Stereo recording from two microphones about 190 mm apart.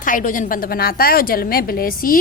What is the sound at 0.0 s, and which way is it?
A woman's voice, 45° left (ahead or behind).